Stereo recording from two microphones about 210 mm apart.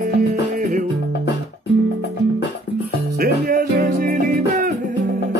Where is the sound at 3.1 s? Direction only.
45° right (ahead or behind).